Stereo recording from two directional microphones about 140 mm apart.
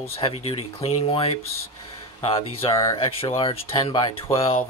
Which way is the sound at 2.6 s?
45° left (ahead or behind).